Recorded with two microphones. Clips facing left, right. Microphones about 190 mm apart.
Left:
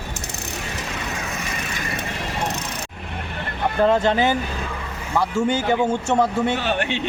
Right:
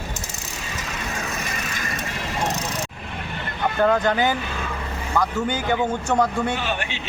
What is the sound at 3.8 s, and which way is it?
Speech, 25° left (ahead or behind).